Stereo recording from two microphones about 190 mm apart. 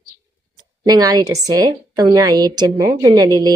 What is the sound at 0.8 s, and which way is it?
A woman's voice, 20° right (ahead or behind).